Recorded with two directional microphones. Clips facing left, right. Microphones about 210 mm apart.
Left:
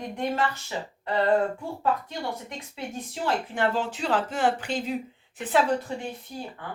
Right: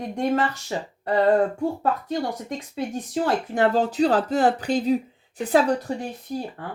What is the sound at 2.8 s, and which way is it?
Speech, 40° right (ahead or behind).